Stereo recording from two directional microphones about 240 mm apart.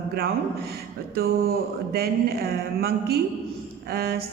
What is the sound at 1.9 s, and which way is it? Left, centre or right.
A woman's voice, right.